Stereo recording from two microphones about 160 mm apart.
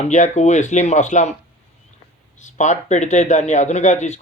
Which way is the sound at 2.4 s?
50° left (ahead or behind).